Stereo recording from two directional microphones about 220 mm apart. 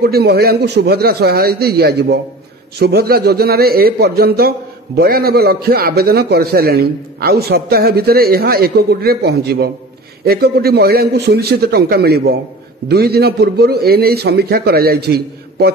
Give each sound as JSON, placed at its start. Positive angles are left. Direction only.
{"t": 0.0, "sound": "a man's voice", "side_deg": -45}